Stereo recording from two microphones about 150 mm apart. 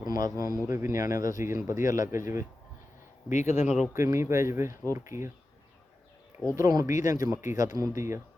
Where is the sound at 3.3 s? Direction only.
50° left (ahead or behind).